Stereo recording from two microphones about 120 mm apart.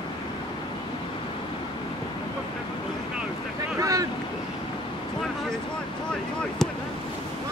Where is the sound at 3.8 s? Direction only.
25° right (ahead or behind).